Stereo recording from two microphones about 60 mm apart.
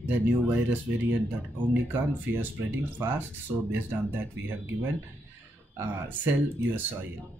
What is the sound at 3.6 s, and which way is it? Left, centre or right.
Speech, right.